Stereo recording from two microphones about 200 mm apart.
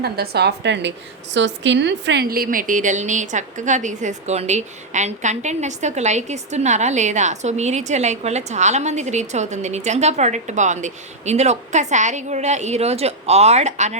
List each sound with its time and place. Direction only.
0.0 s a woman's voice: 55° right (ahead or behind); by 14.0 s 35° right (ahead or behind)